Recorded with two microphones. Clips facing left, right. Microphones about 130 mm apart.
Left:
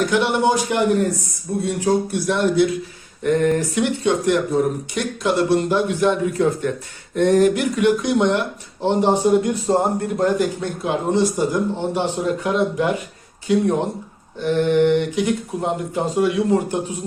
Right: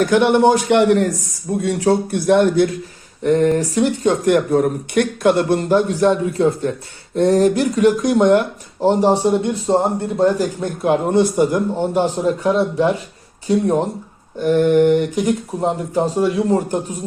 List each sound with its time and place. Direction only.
0.0 s speech: 50° right (ahead or behind); by 2.0 s 80° right
2.1 s a man's voice: 50° right (ahead or behind)
3.2 s speech: 30° right (ahead or behind)
4.3 s a man's voice: 55° right (ahead or behind); by 10.4 s 30° right (ahead or behind)
10.6 s a man's voice: 50° right (ahead or behind)
12.2 s speech: 35° right (ahead or behind)